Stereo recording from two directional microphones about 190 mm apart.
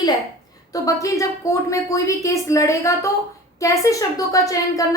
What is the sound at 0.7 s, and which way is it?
A woman's voice, 15° left (ahead or behind).